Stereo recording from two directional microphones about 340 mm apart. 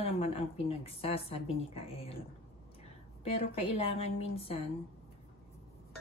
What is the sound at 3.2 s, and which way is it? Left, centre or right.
A woman's voice, centre.